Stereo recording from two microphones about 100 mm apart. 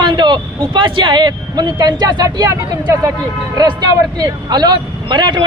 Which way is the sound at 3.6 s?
40° right (ahead or behind).